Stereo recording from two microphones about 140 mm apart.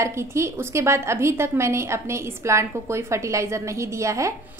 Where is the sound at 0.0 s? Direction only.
20° right (ahead or behind).